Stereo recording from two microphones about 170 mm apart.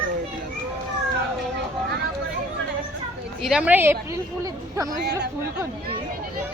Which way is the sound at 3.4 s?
5° right (ahead or behind).